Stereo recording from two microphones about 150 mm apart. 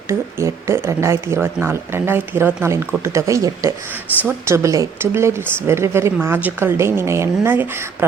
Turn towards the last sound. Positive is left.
turn(degrees=-15)  # may be behind; listen again after turning